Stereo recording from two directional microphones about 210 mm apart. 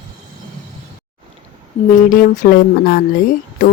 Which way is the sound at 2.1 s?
40° left (ahead or behind).